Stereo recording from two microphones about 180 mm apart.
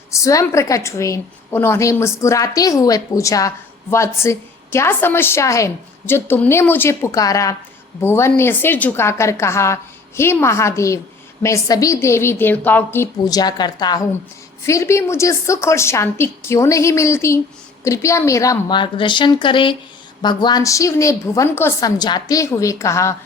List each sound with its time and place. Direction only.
0.1 s a woman's voice: 20° left (ahead or behind)